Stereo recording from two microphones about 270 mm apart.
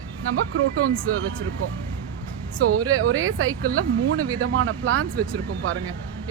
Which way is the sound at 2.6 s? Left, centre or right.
Right.